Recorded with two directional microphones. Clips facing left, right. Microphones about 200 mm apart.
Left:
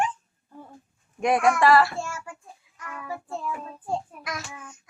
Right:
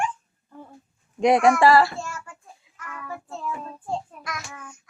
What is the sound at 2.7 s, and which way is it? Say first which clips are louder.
Child singing: right 3 dB; 25° right (ahead or behind).